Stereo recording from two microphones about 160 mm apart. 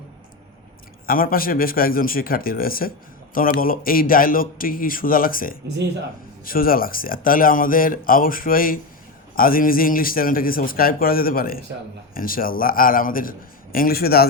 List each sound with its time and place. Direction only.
1.0 s a man's voice: 65° left (ahead or behind)